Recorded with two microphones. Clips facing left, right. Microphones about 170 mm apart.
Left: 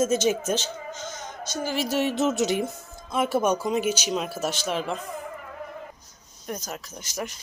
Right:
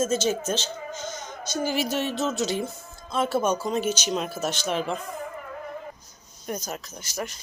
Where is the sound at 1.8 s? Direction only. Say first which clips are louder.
Left 3 dB; 5° left (ahead or behind).